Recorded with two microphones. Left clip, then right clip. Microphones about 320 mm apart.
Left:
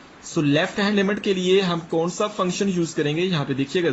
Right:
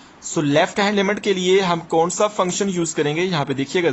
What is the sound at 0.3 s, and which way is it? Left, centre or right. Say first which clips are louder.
A man's voice: right 4 dB; centre.